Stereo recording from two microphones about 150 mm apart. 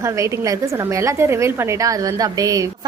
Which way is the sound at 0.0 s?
20° right (ahead or behind).